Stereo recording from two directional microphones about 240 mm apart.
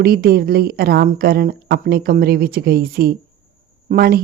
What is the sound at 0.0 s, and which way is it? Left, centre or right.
Speech, right.